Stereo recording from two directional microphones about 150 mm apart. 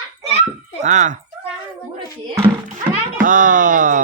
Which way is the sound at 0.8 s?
55° right (ahead or behind).